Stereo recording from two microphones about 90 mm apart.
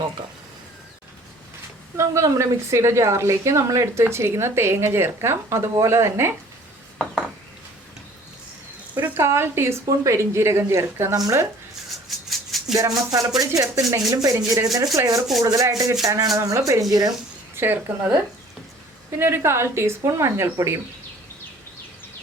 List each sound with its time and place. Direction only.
2.0 s a woman's voice: 35° right (ahead or behind)
9.0 s a woman's voice: 25° right (ahead or behind)
12.3 s maraca: centre (ahead or behind)
12.7 s a woman's voice: 45° right (ahead or behind)
16.9 s speech: 50° right (ahead or behind)
17.5 s a woman's voice: 25° right (ahead or behind)